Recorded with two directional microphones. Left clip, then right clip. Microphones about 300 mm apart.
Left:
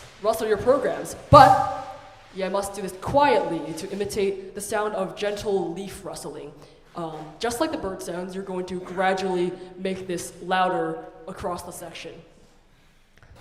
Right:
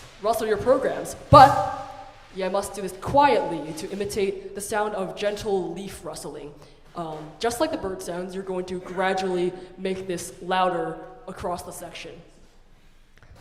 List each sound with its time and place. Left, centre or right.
0.2 s speech: centre